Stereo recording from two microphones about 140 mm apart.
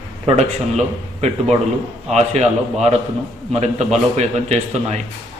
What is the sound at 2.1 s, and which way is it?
A man's voice, 50° right (ahead or behind).